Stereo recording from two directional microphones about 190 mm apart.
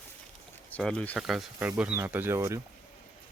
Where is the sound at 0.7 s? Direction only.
5° left (ahead or behind); by 2.6 s 15° right (ahead or behind).